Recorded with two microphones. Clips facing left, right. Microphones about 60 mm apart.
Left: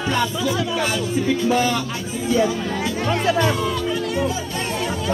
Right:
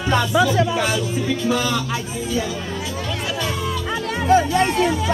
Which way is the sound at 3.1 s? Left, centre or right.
Left.